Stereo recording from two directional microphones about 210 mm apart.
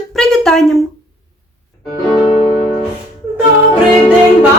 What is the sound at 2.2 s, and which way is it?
Music, 20° left (ahead or behind).